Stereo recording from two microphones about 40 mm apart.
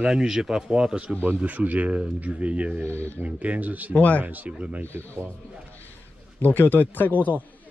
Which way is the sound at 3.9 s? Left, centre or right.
Left.